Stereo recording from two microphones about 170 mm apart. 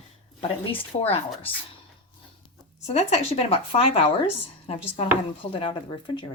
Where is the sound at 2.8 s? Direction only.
40° left (ahead or behind).